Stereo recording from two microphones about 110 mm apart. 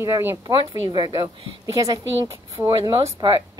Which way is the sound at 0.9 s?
40° right (ahead or behind).